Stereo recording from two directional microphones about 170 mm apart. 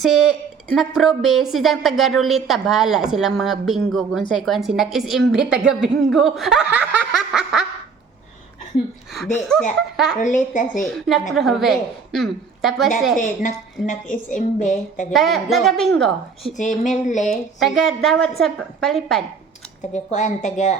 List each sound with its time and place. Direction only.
0.0 s a woman's voice: centre (ahead or behind)
9.1 s a woman's voice: centre (ahead or behind)
10.2 s a woman's voice: 50° left (ahead or behind)
10.8 s a woman's voice: centre (ahead or behind)
13.1 s a woman's voice: 50° left (ahead or behind)
15.1 s a woman's voice: centre (ahead or behind)
16.6 s a woman's voice: 45° left (ahead or behind)
17.3 s a woman's voice: centre (ahead or behind)
19.9 s a woman's voice: 45° left (ahead or behind)